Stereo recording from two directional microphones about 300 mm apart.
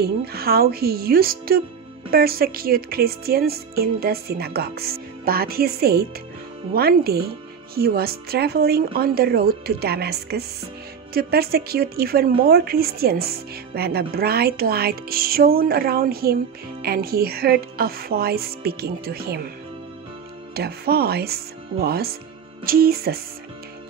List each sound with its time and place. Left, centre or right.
0.0 s speech: right
20.5 s speech: right